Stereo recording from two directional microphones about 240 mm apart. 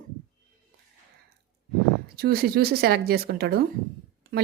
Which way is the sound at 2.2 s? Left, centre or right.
Right.